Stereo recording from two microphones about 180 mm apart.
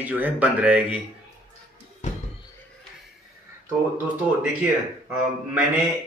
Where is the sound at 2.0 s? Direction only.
40° left (ahead or behind).